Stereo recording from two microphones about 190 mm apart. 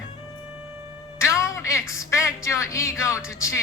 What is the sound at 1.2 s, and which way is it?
A woman's voice, 15° left (ahead or behind).